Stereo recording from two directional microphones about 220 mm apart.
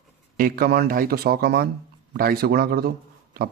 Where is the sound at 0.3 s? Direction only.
40° right (ahead or behind).